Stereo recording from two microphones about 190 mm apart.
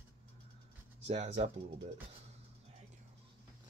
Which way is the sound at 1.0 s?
35° right (ahead or behind).